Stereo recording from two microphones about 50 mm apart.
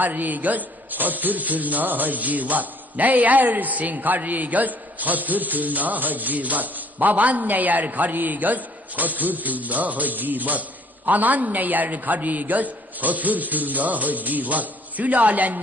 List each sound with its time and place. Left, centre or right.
0.0 s a man's voice: right